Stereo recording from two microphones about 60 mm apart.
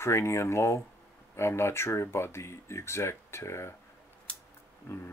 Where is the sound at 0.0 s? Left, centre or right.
Left.